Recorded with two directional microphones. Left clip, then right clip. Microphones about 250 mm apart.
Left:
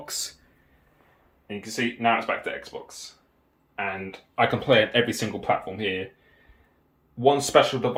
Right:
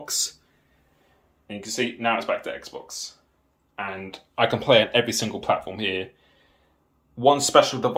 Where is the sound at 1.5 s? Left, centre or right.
Centre.